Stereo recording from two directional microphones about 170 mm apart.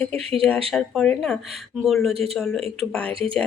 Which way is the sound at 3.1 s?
30° right (ahead or behind).